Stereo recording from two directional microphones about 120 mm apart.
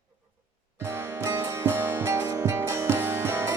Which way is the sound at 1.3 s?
20° right (ahead or behind).